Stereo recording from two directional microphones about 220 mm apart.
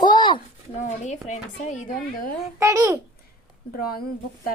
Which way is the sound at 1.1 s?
35° left (ahead or behind).